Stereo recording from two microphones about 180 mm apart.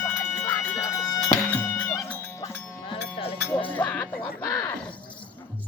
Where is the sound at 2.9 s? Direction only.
30° left (ahead or behind).